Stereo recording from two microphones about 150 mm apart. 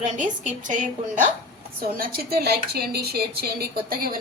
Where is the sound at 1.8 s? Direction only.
85° right.